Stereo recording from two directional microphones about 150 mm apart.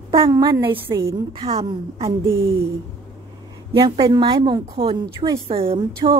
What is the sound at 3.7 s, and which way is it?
Speech, 40° right (ahead or behind).